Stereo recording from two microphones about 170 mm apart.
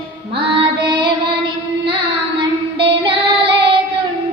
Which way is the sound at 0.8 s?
25° right (ahead or behind).